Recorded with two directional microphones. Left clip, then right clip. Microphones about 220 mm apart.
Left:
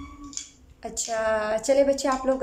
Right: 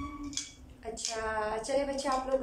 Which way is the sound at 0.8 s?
55° left (ahead or behind).